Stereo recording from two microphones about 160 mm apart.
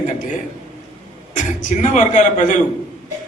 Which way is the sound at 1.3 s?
50° left (ahead or behind).